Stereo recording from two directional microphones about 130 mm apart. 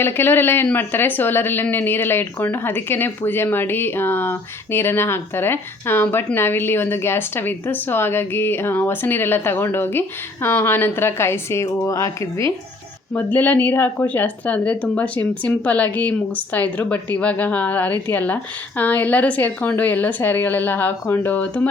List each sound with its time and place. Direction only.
0.0 s a woman's voice: 15° left (ahead or behind)
13.1 s speech: 10° left (ahead or behind)